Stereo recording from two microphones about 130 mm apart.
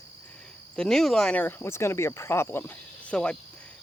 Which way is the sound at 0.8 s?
5° left (ahead or behind).